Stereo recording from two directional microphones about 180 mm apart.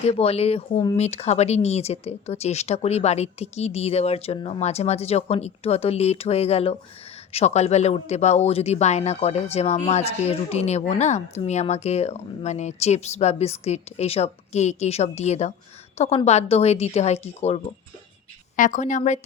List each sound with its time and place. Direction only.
0.1 s a woman's voice: 35° left (ahead or behind)